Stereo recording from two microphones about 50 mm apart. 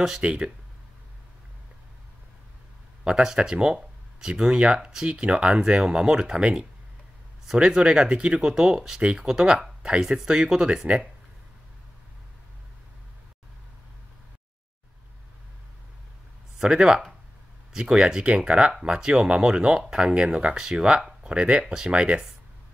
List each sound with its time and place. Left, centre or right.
0.2 s speech: right
3.0 s speech: centre
7.7 s speech: centre
16.5 s speech: centre